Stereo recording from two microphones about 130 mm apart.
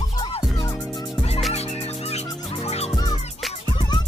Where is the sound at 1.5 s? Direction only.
55° left (ahead or behind).